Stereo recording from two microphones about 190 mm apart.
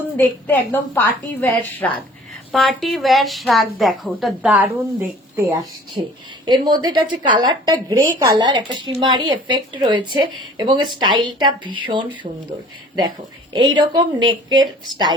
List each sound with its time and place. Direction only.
0.2 s a woman's voice: 10° left (ahead or behind); by 12.0 s 25° right (ahead or behind)
13.5 s a woman's voice: 25° right (ahead or behind)